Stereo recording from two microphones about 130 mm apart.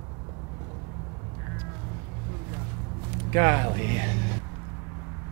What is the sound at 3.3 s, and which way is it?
Speech, 20° right (ahead or behind).